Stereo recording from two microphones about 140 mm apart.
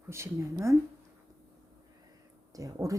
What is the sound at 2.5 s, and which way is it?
Speech, 25° right (ahead or behind).